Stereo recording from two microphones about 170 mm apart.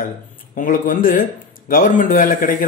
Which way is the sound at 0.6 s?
50° left (ahead or behind).